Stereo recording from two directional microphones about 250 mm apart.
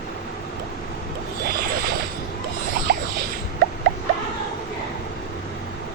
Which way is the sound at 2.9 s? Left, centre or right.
Right.